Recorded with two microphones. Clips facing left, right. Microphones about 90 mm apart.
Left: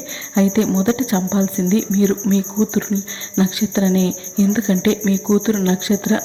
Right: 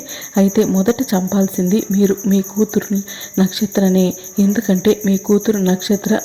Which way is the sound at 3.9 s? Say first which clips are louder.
Right 2 dB; 40° left (ahead or behind).